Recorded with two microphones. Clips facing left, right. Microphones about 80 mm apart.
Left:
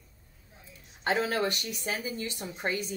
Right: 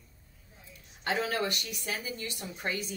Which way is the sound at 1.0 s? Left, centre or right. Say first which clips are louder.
Left 3 dB; left.